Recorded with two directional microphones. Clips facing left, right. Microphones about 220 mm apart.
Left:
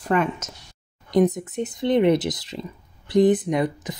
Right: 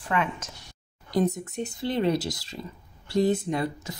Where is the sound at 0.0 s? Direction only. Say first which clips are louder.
Left 6 dB; 40° left (ahead or behind).